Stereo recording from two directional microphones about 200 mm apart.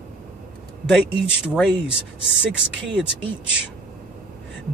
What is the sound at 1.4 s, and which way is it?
Speech, centre (ahead or behind).